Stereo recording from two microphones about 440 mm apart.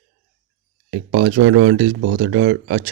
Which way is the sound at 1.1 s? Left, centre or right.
Right.